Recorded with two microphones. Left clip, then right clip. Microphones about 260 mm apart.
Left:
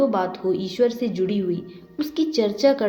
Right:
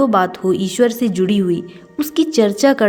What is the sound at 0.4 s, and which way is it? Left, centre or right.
A woman's voice, right.